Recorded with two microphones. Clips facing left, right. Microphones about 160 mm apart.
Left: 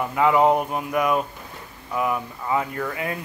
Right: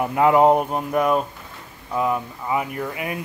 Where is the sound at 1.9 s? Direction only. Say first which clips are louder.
Right 2 dB; 20° right (ahead or behind).